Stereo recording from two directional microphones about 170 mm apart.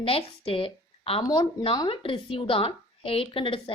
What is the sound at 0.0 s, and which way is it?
A woman's voice, 35° left (ahead or behind).